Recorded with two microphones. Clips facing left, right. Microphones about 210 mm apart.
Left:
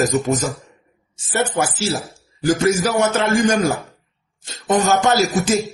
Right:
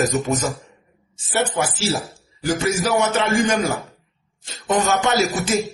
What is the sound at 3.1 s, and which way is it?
A man's voice, 45° left (ahead or behind).